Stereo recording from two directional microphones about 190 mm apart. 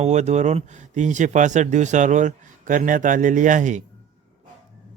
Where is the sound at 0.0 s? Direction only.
35° right (ahead or behind).